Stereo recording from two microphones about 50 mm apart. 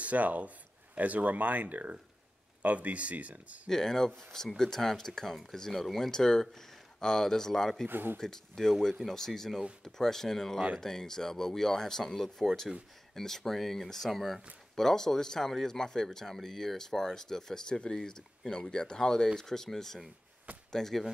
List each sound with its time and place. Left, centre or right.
0.0 s speech: right
3.6 s speech: centre
7.9 s speech: right
8.2 s speech: centre